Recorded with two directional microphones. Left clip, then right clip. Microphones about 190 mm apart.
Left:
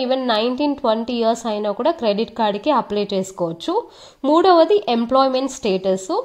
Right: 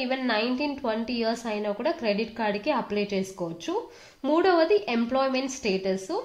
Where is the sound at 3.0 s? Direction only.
15° left (ahead or behind).